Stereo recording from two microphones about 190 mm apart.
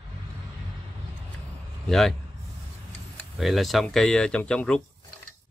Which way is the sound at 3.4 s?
Centre (ahead or behind).